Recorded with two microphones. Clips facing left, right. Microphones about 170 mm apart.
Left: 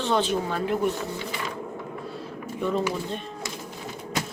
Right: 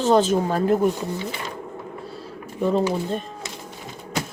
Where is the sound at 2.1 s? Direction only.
35° right (ahead or behind).